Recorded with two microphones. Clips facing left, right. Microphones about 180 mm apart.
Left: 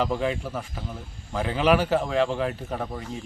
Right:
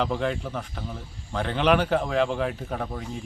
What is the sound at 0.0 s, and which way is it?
A man's voice, centre (ahead or behind).